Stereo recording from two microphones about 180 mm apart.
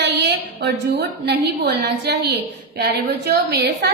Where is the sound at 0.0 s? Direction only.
75° right (ahead or behind).